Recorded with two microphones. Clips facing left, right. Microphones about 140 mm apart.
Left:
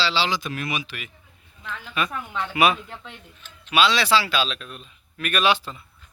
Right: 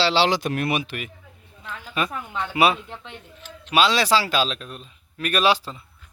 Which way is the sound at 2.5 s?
30° right (ahead or behind).